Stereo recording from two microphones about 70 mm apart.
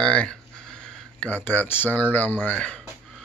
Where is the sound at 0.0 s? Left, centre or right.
Centre.